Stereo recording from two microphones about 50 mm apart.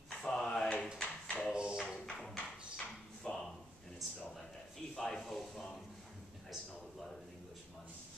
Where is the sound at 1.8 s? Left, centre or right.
Centre.